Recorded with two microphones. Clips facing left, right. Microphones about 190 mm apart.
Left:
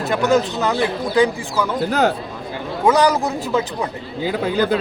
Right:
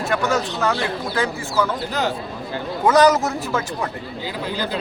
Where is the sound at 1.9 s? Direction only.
55° left (ahead or behind).